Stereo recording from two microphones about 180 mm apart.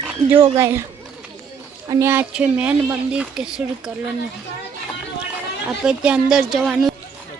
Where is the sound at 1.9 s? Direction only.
15° right (ahead or behind).